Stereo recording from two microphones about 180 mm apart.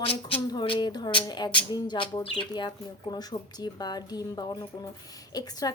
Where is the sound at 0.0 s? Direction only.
30° left (ahead or behind).